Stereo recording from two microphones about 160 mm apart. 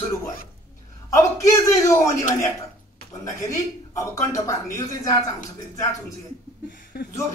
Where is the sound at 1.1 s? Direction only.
20° left (ahead or behind).